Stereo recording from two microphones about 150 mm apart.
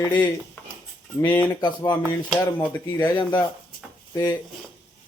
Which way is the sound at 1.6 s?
30° left (ahead or behind).